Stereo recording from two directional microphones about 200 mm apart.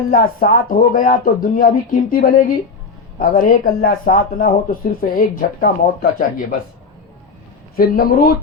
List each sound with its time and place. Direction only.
0.1 s speech: 45° left (ahead or behind)
7.8 s speech: 45° left (ahead or behind)